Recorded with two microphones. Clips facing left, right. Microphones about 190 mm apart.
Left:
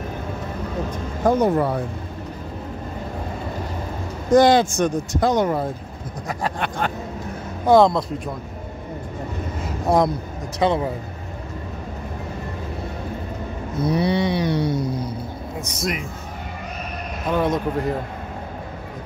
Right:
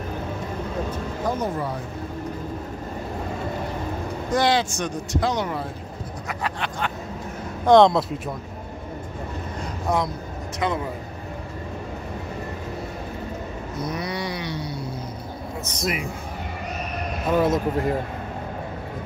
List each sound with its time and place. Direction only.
1.2 s speech: 60° left (ahead or behind)
4.3 s speech: 45° left (ahead or behind)
6.2 s a sound: 40° left (ahead or behind)
7.6 s speech: 5° left (ahead or behind)
9.9 s a sound: 30° left (ahead or behind)
13.8 s a sound: 30° left (ahead or behind)
14.5 s speech: 65° left (ahead or behind)
15.8 s speech: 5° right (ahead or behind)
17.4 s speech: 5° right (ahead or behind)